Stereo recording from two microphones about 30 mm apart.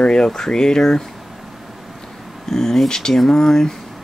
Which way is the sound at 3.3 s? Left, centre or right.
Centre.